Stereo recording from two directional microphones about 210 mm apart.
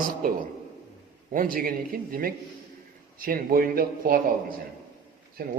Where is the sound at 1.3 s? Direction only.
40° right (ahead or behind).